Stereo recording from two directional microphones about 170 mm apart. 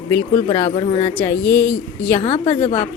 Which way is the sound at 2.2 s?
40° left (ahead or behind).